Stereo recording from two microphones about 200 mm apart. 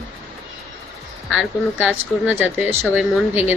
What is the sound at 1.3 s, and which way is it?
A woman's voice, 5° right (ahead or behind).